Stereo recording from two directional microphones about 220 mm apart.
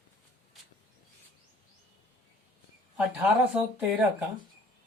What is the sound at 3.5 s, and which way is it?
Speech, 5° right (ahead or behind).